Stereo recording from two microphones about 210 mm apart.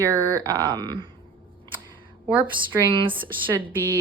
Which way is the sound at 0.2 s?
15° right (ahead or behind).